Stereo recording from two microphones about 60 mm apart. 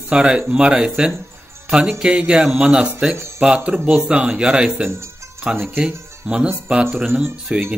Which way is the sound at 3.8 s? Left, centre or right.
Centre.